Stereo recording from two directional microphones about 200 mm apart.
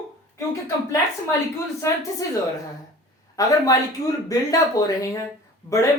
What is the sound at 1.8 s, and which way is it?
Speech, 15° left (ahead or behind).